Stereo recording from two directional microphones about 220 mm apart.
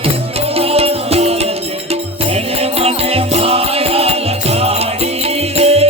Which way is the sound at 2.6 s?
25° right (ahead or behind).